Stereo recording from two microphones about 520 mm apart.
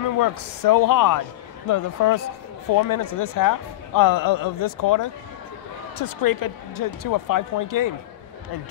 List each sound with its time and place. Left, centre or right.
0.2 s a man's voice: left
6.2 s a man's voice: left